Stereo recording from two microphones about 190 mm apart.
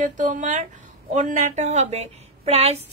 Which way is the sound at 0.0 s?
40° right (ahead or behind).